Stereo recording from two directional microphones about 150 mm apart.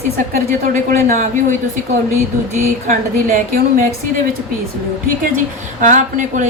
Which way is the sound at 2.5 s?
60° right (ahead or behind).